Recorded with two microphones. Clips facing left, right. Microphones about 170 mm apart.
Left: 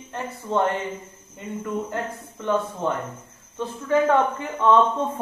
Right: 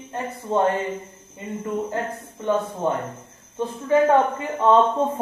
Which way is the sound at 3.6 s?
25° right (ahead or behind).